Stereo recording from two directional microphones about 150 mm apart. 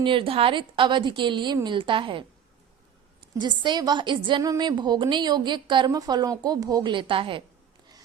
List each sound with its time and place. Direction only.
0.0 s a woman's voice: 35° right (ahead or behind)
3.3 s a woman's voice: 30° right (ahead or behind)